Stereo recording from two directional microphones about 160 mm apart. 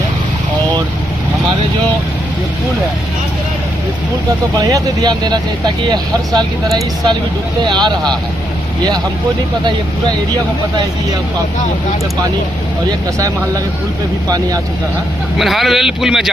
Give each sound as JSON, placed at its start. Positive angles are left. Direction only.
{"t": 4.5, "sound": "speech", "side_deg": -25}
{"t": 7.6, "sound": "speech", "side_deg": -25}
{"t": 14.3, "sound": "speech", "side_deg": -25}
{"t": 15.4, "sound": "a man's voice", "side_deg": 0}